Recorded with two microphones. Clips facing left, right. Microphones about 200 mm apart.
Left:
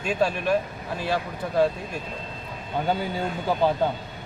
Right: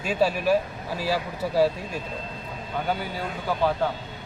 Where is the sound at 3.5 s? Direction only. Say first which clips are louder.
Left 1 dB; 25° left (ahead or behind).